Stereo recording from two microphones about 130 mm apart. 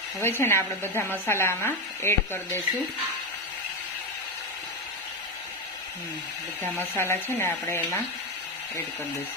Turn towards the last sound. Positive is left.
turn(degrees=15)  # may be behind; listen again after turning